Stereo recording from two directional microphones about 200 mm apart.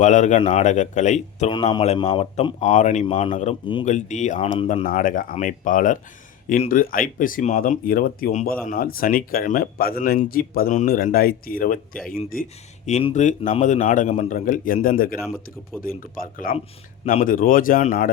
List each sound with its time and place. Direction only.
0.0 s speech: 35° left (ahead or behind)
15.2 s speech: 5° right (ahead or behind)
15.8 s speech: 45° left (ahead or behind)